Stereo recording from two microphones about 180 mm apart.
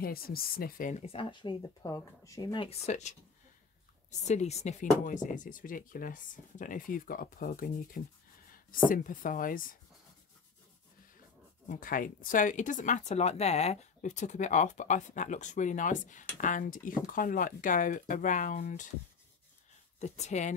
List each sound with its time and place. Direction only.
0.0 s speech: 55° left (ahead or behind); by 3.2 s 40° left (ahead or behind)
4.2 s speech: 40° left (ahead or behind)
11.7 s speech: 50° left (ahead or behind)
20.0 s speech: 40° left (ahead or behind)